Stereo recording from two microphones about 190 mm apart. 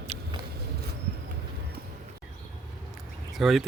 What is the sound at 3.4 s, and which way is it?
Speech, centre (ahead or behind).